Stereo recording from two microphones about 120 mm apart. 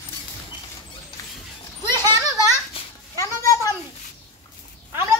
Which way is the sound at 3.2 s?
25° left (ahead or behind).